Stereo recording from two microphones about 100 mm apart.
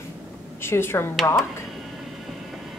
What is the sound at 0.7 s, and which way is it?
Speech, 25° left (ahead or behind).